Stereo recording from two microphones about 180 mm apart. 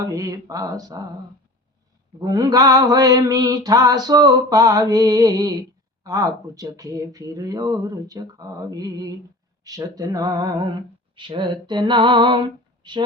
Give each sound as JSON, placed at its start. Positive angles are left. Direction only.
{"t": 0.1, "sound": "mantra", "side_deg": -20}
{"t": 2.2, "sound": "mantra", "side_deg": -20}